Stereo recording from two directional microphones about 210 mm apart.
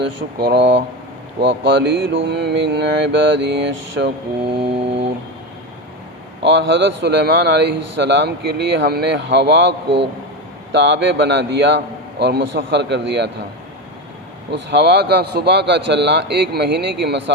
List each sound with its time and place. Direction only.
0.3 s a man's voice: 50° right (ahead or behind)
4.4 s a sound: 25° right (ahead or behind)
6.4 s a man's voice: 60° right (ahead or behind)
14.5 s speech: 55° right (ahead or behind)